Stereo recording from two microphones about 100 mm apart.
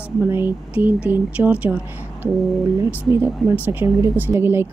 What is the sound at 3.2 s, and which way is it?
Speech, 15° right (ahead or behind).